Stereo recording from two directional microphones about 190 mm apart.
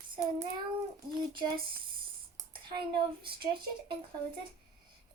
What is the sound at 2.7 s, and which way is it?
Speech, 25° right (ahead or behind).